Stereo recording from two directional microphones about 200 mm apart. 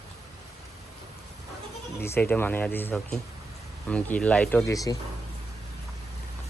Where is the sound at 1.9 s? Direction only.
10° left (ahead or behind).